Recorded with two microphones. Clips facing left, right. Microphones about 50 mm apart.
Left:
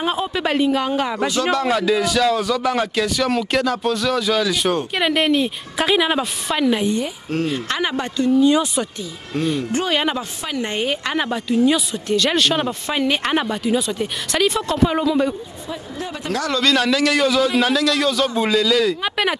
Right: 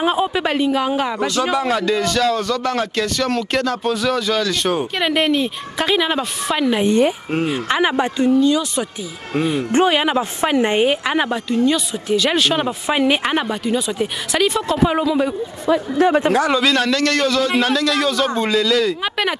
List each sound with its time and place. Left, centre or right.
0.0 s speech: centre
6.9 s speech: right
7.2 s a woman's voice: centre
9.4 s speech: right
9.8 s a woman's voice: centre
10.4 s a woman's voice: right; by 15.3 s centre
15.6 s speech: right
16.3 s speech: right
16.6 s speech: centre